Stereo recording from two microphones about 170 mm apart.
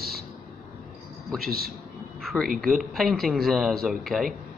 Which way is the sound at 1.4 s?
60° right (ahead or behind).